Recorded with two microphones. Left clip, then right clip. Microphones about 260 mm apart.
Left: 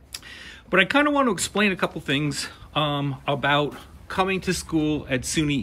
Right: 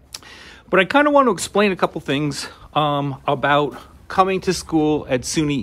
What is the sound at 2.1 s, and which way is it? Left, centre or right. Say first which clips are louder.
Speech: right 3 dB; centre.